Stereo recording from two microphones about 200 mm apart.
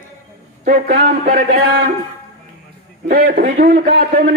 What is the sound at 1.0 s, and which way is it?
Speech, 45° right (ahead or behind).